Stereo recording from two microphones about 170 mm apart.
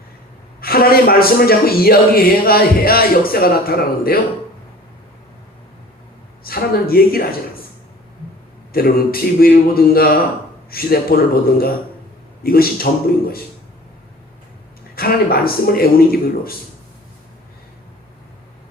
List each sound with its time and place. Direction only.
0.6 s a man's voice: 60° left (ahead or behind)
6.4 s speech: 60° left (ahead or behind)
8.7 s a man's voice: 60° left (ahead or behind)
14.9 s a man's voice: 60° left (ahead or behind)